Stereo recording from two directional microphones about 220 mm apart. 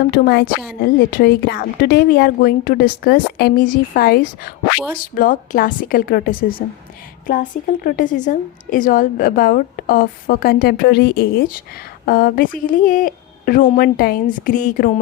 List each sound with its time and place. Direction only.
0.1 s a woman's voice: 45° left (ahead or behind)